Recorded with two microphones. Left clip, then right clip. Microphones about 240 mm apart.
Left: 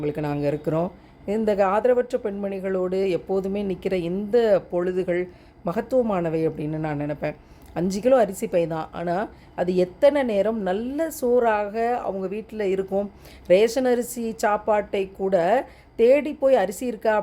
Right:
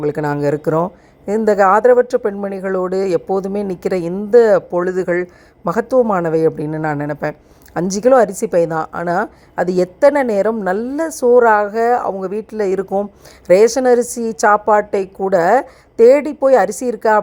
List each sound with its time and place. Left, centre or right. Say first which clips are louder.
0.6 s a woman's voice: right 8 dB; right